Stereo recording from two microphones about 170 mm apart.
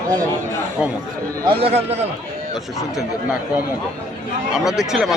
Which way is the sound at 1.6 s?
35° right (ahead or behind).